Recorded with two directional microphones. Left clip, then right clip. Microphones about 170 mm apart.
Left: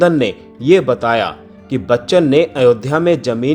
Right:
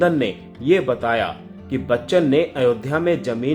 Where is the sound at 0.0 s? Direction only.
40° left (ahead or behind).